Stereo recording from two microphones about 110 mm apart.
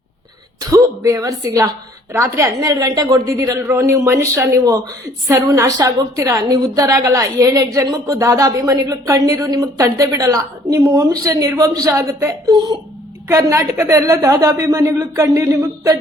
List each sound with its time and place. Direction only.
0.7 s a woman's voice: 30° right (ahead or behind)
12.5 s a woman's voice: 40° right (ahead or behind)
13.2 s speech: 25° right (ahead or behind)